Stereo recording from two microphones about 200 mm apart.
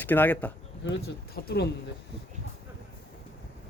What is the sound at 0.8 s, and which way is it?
Speech, 55° left (ahead or behind).